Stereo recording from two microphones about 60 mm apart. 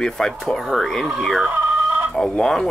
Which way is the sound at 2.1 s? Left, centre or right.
Centre.